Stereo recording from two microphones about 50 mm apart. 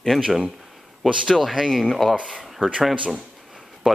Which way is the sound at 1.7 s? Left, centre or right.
Centre.